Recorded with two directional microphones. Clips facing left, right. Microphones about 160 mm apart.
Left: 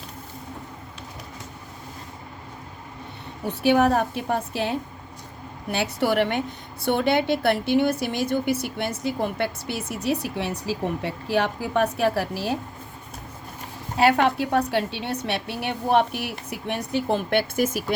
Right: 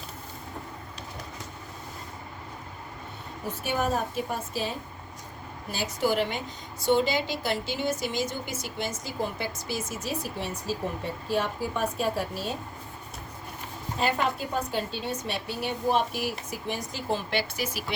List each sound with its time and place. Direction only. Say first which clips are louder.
3.4 s a woman's voice: left 10 dB; 70° left (ahead or behind)
13.9 s a woman's voice: left 8 dB; 70° left (ahead or behind); by 17.9 s 50° left (ahead or behind)